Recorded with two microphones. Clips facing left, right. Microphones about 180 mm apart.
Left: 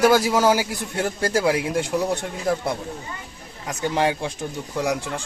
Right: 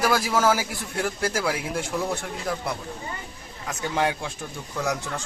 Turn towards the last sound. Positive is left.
turn(degrees=15)  # may be behind; listen again after turning